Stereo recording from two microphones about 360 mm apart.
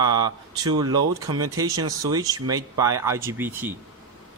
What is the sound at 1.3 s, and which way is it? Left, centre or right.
Speech, right.